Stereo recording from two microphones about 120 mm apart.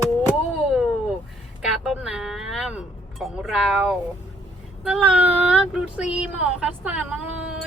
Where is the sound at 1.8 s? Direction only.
5° right (ahead or behind).